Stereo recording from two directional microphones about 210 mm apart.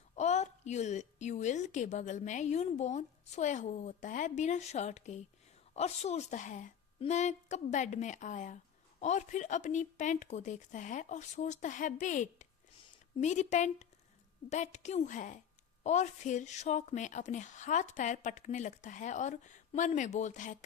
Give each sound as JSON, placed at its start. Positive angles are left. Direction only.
{"t": 0.2, "sound": "a woman's voice", "side_deg": 35}